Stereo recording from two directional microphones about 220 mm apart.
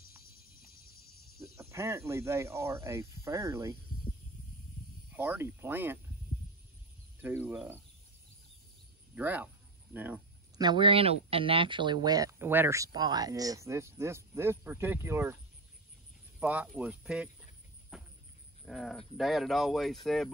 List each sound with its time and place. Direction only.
0.0 s a sound: 45° left (ahead or behind)
1.6 s speech: 10° right (ahead or behind)
5.1 s speech: 10° right (ahead or behind)
7.2 s speech: 10° right (ahead or behind)
9.1 s speech: 5° right (ahead or behind)
10.6 s speech: 20° right (ahead or behind)
16.3 s speech: 5° right (ahead or behind)
17.9 s a sound: centre (ahead or behind)
18.7 s speech: centre (ahead or behind)